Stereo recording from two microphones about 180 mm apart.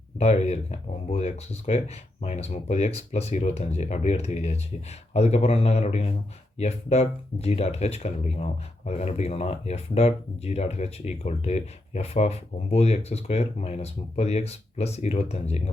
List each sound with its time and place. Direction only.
0.2 s speech: 35° left (ahead or behind)